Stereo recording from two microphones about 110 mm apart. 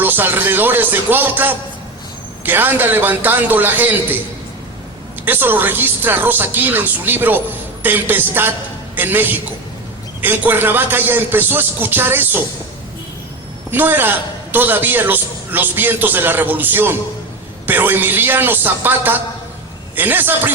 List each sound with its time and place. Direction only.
0.0 s a woman's voice: 20° right (ahead or behind)
5.2 s a woman's voice: 20° right (ahead or behind)
13.7 s a woman's voice: 20° right (ahead or behind)